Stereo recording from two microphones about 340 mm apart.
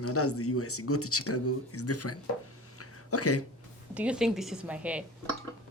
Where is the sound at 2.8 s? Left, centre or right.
Left.